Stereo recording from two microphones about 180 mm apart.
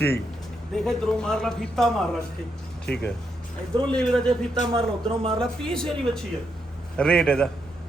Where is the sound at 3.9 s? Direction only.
5° left (ahead or behind).